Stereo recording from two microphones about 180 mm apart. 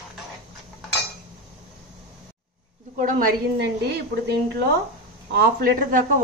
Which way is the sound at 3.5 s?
65° right (ahead or behind).